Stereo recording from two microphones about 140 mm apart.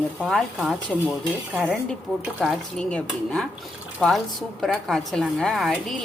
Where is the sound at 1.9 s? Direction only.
Centre (ahead or behind).